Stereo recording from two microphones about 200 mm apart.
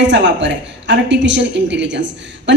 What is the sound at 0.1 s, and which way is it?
A woman's voice, 65° right (ahead or behind).